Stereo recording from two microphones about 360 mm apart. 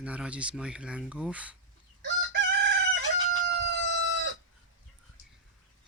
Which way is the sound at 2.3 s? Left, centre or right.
Right.